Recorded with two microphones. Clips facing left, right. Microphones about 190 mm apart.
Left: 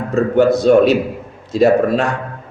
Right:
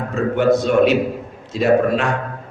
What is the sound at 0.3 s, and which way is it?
A man's voice, 40° left (ahead or behind).